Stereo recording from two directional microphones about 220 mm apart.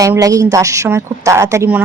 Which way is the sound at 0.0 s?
15° right (ahead or behind).